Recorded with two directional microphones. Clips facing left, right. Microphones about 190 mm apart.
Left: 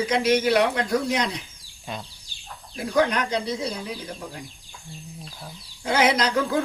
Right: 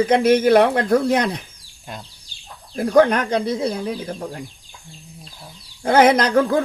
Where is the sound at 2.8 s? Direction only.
50° right (ahead or behind).